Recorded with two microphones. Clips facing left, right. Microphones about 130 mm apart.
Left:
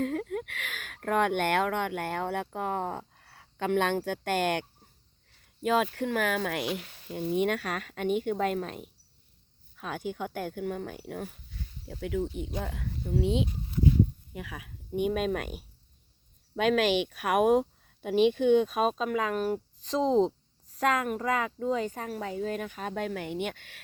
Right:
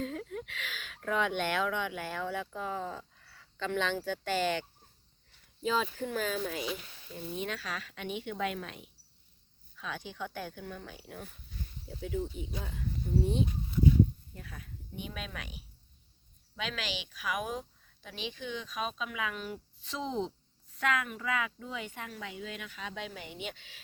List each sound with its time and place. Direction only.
0.0 s speech: 55° left (ahead or behind)
5.6 s speech: 60° left (ahead or behind); by 8.9 s 40° left (ahead or behind)
9.7 s speech: 50° left (ahead or behind); by 14.7 s 85° left
14.9 s speech: 55° left (ahead or behind)